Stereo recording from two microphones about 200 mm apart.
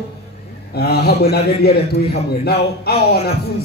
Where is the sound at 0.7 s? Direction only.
55° left (ahead or behind).